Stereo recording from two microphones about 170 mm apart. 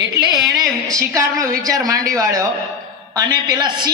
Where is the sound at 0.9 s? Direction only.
20° right (ahead or behind).